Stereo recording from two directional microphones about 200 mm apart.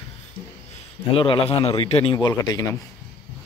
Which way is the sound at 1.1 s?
25° left (ahead or behind).